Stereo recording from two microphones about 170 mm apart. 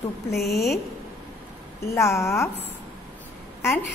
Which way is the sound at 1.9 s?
15° left (ahead or behind).